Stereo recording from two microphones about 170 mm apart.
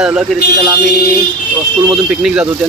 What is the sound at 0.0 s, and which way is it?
Speech, 5° right (ahead or behind).